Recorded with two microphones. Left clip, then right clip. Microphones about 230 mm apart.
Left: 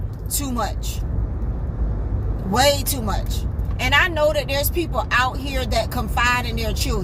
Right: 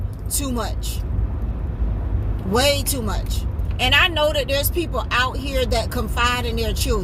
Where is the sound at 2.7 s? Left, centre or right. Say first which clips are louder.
Even; centre.